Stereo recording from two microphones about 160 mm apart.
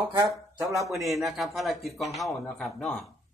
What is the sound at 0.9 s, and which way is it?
Speech, centre (ahead or behind).